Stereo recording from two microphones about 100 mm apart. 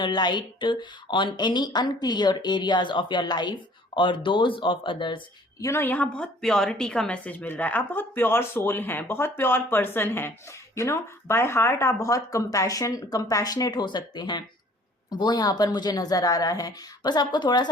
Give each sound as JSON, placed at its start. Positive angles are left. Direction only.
{"t": 0.0, "sound": "speech", "side_deg": 50}
{"t": 5.5, "sound": "a woman's voice", "side_deg": 25}